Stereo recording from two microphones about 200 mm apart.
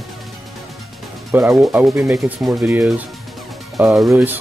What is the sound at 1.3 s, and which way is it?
Speech, 10° right (ahead or behind).